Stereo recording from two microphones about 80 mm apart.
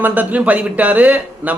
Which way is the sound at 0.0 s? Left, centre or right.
Right.